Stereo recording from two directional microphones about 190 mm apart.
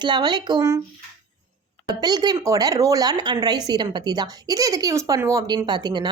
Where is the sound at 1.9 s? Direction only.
20° right (ahead or behind).